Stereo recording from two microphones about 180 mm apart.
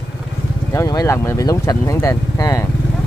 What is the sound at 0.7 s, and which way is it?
Speech, 20° left (ahead or behind).